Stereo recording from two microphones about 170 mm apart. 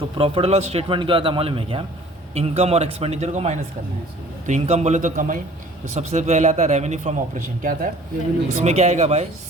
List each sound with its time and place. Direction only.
0.2 s a man's voice: 35° right (ahead or behind); by 7.9 s 50° right (ahead or behind)
8.6 s a man's voice: 40° right (ahead or behind)